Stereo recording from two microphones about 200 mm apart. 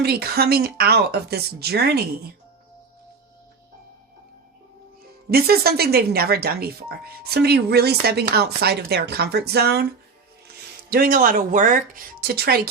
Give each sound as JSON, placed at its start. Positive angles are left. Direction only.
{"t": 0.0, "sound": "speech", "side_deg": -50}
{"t": 5.3, "sound": "speech", "side_deg": -50}
{"t": 10.8, "sound": "speech", "side_deg": -50}